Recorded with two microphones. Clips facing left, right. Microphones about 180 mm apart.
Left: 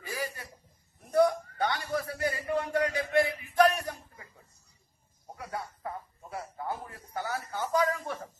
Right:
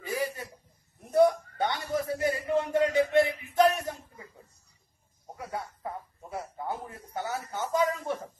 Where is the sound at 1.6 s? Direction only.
20° right (ahead or behind).